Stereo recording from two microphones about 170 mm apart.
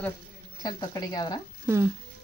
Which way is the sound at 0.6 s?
25° left (ahead or behind).